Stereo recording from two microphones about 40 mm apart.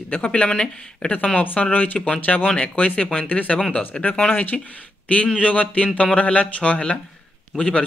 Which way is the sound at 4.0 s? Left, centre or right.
Left.